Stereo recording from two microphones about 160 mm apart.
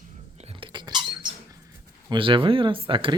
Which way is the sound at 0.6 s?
30° right (ahead or behind).